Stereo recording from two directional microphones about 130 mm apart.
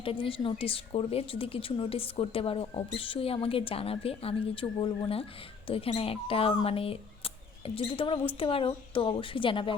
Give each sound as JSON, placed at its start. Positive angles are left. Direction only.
{"t": 0.0, "sound": "a woman's voice", "side_deg": 45}